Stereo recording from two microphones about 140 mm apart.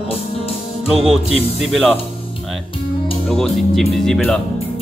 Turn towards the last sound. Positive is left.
turn(degrees=5)  # may be behind; listen again after turning